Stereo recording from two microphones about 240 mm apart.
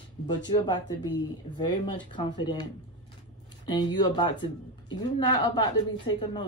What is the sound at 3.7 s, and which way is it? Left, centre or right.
A woman's voice, centre.